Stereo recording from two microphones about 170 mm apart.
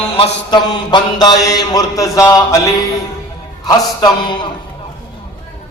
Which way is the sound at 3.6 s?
25° left (ahead or behind).